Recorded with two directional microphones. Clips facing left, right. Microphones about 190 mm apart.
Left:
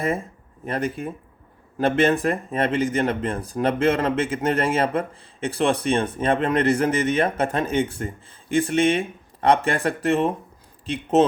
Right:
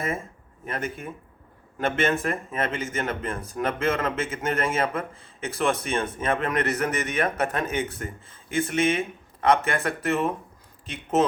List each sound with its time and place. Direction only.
0.6 s speech: 35° left (ahead or behind)